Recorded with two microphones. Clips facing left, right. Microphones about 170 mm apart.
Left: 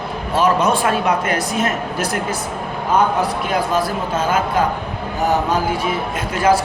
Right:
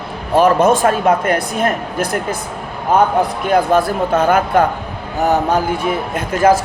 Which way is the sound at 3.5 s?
55° right (ahead or behind).